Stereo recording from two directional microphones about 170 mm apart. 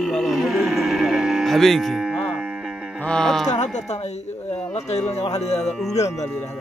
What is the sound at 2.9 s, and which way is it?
Music, 5° left (ahead or behind).